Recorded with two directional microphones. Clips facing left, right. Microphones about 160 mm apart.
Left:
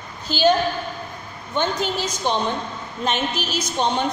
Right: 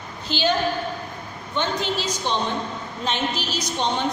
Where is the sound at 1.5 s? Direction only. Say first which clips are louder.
Left 2 dB; 45° left (ahead or behind).